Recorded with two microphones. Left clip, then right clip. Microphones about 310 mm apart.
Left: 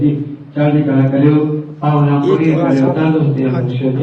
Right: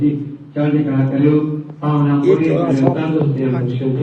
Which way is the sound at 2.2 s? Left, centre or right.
Left.